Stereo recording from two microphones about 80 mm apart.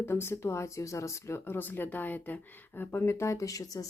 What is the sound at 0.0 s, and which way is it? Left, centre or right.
Speech, left.